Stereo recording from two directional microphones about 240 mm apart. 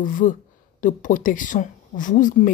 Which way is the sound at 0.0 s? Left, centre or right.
Left.